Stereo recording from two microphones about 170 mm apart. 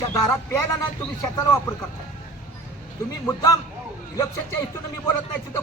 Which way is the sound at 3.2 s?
20° left (ahead or behind).